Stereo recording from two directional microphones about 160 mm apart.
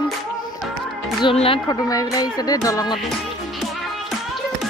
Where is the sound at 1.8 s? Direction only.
25° left (ahead or behind).